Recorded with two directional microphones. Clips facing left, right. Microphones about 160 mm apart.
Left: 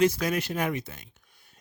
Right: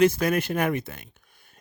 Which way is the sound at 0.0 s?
55° right (ahead or behind).